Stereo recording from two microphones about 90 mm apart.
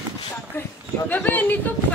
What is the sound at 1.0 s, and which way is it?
Speech, 20° left (ahead or behind).